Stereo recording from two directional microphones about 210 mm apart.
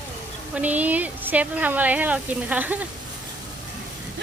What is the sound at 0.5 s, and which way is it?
Speech, 5° right (ahead or behind).